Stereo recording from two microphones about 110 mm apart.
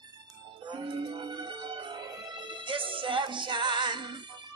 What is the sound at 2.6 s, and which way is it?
Music, 50° right (ahead or behind).